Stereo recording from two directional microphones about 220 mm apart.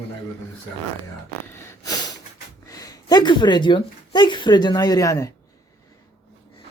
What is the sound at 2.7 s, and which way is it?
Speech, 15° left (ahead or behind).